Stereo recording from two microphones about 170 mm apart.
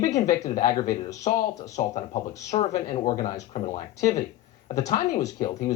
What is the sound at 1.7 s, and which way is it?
Speech, 45° left (ahead or behind).